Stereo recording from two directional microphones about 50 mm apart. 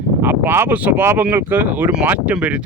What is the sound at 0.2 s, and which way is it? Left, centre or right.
Speech, right.